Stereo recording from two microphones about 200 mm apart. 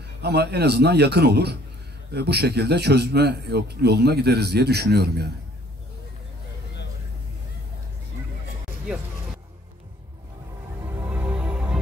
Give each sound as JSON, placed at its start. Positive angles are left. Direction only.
{"t": 0.2, "sound": "speech", "side_deg": -55}
{"t": 11.1, "sound": "music", "side_deg": -5}